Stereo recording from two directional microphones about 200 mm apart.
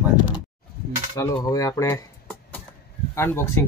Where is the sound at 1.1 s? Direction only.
15° left (ahead or behind).